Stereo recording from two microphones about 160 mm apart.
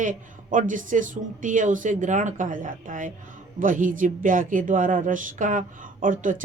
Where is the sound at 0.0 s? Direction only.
55° right (ahead or behind).